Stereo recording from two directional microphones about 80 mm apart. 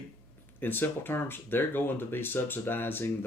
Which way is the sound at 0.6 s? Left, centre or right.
Left.